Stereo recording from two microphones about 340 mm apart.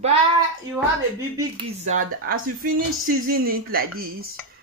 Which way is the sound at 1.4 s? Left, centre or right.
Centre.